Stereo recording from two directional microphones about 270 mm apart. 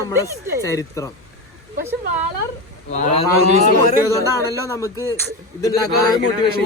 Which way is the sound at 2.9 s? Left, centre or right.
Left.